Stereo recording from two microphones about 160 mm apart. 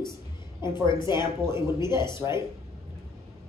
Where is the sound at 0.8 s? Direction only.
30° left (ahead or behind).